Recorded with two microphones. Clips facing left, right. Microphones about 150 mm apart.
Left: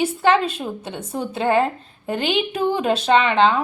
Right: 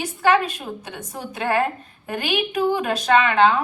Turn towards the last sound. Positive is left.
turn(degrees=25)  # may be behind; listen again after turning